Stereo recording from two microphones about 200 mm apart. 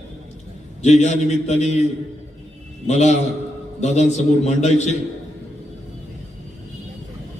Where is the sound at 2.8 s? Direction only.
35° left (ahead or behind).